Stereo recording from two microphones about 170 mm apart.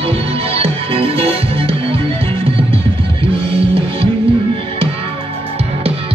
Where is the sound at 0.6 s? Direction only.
35° right (ahead or behind).